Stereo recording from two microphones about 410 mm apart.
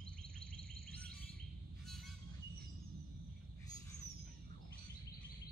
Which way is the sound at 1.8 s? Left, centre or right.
Centre.